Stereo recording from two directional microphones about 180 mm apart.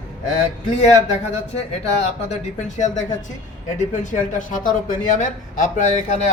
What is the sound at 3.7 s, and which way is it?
A man's voice, 45° left (ahead or behind).